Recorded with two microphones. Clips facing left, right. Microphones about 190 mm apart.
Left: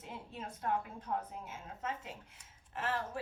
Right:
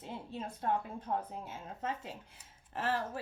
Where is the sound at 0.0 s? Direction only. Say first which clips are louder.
Right 4 dB; 30° right (ahead or behind).